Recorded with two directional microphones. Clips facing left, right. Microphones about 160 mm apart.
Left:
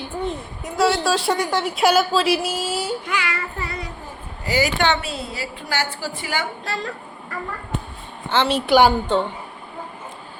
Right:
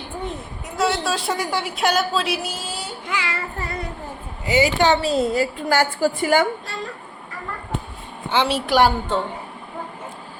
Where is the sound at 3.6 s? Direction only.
45° right (ahead or behind).